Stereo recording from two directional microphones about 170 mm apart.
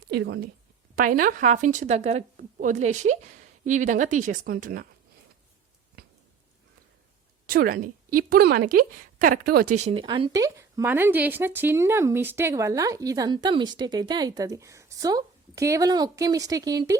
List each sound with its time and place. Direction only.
0.1 s speech: 80° right
0.9 s speech: 55° right (ahead or behind)
6.0 s a sound: 65° right (ahead or behind)
7.4 s speech: 60° right (ahead or behind)
9.7 s speech: 35° right (ahead or behind); by 17.0 s 20° right (ahead or behind)